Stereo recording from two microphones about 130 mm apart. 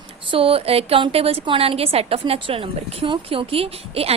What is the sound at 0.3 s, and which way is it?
A woman's voice, 45° right (ahead or behind).